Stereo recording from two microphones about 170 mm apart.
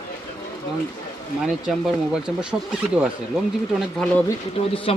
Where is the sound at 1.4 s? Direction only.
5° right (ahead or behind).